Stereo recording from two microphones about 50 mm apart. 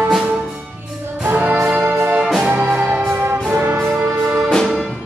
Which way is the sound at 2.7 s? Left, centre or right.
Right.